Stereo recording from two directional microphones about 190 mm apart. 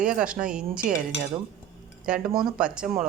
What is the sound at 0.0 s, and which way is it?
Speech, 5° right (ahead or behind).